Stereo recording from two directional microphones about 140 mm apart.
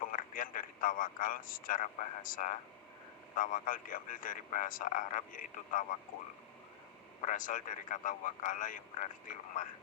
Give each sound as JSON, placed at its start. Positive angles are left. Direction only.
{"t": 0.1, "sound": "a man's voice", "side_deg": 80}
{"t": 7.2, "sound": "a man's voice", "side_deg": 65}